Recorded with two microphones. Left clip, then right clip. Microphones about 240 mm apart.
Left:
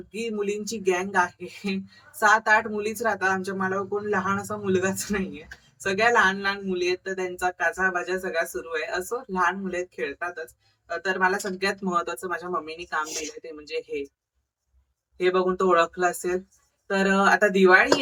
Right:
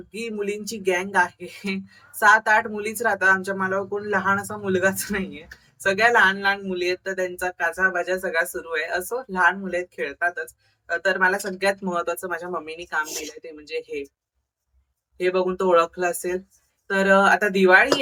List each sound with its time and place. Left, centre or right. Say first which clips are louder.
0.1 s speech: even; centre
15.2 s speech: even; centre